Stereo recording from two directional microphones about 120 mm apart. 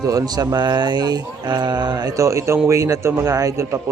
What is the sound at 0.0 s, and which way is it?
A man's voice, 30° right (ahead or behind).